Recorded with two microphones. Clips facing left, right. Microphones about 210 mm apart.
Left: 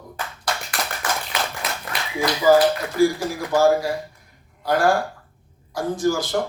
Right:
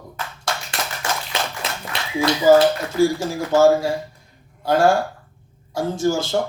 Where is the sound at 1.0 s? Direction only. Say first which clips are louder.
Right 1 dB; 25° right (ahead or behind).